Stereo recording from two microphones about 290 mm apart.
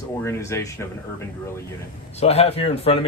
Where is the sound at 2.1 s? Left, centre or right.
Left.